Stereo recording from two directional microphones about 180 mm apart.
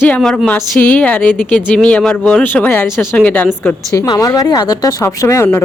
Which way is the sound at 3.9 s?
20° left (ahead or behind).